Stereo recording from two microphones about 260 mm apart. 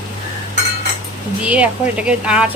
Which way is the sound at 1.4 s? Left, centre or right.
Centre.